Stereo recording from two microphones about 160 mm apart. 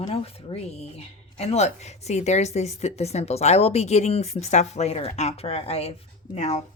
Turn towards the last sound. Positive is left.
turn(degrees=45)  # may be behind; listen again after turning